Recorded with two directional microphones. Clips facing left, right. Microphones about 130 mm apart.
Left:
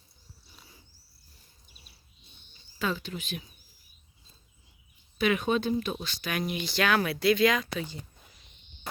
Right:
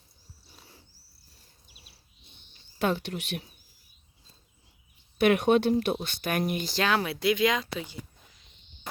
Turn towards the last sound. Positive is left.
turn(degrees=-25)  # may be behind; listen again after turning